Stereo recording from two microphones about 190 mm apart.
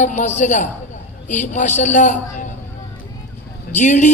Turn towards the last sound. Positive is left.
turn(degrees=40)  # may be behind; listen again after turning